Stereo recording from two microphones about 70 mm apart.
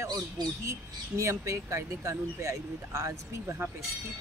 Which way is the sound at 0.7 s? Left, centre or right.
Right.